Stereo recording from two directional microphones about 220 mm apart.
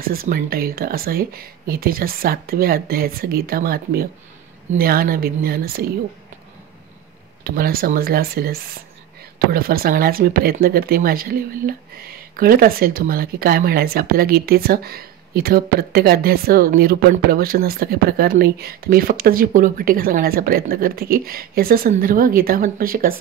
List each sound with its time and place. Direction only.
0.0 s speech: 40° right (ahead or behind)
7.4 s speech: 45° right (ahead or behind)